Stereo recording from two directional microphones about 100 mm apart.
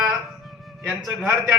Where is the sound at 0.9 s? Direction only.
5° right (ahead or behind).